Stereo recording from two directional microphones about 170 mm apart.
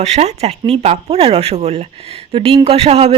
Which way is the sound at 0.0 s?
40° right (ahead or behind).